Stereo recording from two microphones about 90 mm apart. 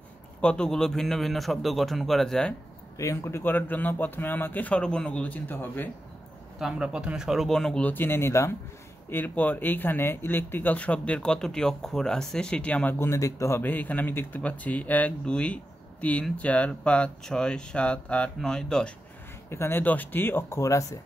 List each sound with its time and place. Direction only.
0.4 s a man's voice: 10° left (ahead or behind)
3.0 s speech: 35° left (ahead or behind)
6.6 s a man's voice: 10° right (ahead or behind)
7.8 s speech: 20° left (ahead or behind)
9.1 s speech: 20° left (ahead or behind)
19.5 s speech: 25° left (ahead or behind)